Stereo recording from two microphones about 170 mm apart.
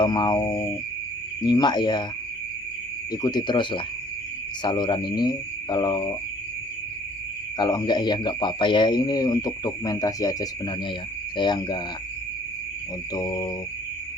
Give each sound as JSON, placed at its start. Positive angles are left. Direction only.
{"t": 0.0, "sound": "speech", "side_deg": 25}
{"t": 3.1, "sound": "speech", "side_deg": 20}
{"t": 7.6, "sound": "speech", "side_deg": 25}
{"t": 13.1, "sound": "speech", "side_deg": 20}